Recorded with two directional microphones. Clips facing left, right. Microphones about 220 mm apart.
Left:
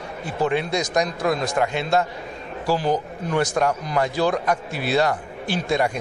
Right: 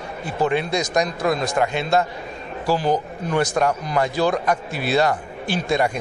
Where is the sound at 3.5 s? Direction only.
20° right (ahead or behind).